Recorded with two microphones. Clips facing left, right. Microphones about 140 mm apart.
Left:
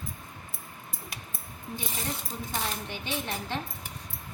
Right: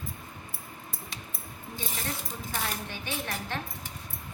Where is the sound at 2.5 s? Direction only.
20° left (ahead or behind).